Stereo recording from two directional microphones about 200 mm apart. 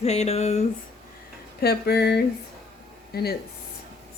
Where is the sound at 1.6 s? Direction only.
55° left (ahead or behind).